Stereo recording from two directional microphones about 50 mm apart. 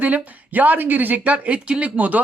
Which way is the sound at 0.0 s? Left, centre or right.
Right.